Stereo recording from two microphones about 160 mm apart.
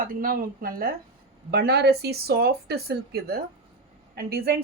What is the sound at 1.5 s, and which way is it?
Speech, 80° right.